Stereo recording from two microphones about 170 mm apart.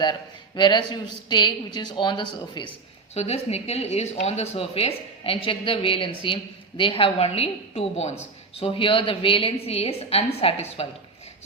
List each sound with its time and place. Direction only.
0.0 s speech: 25° left (ahead or behind)
3.2 s speech: 40° left (ahead or behind)